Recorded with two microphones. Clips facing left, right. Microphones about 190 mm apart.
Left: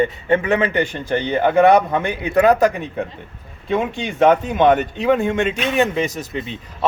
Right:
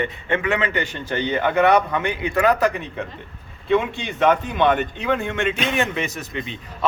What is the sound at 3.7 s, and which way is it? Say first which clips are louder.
A man's voice: even; 40° left (ahead or behind).